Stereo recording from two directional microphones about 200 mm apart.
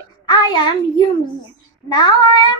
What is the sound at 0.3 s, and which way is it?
A child's voice, 20° left (ahead or behind).